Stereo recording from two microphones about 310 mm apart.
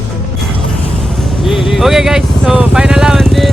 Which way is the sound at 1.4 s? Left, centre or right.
Centre.